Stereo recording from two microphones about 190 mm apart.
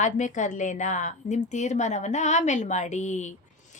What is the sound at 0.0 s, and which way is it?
A woman's voice, 40° left (ahead or behind).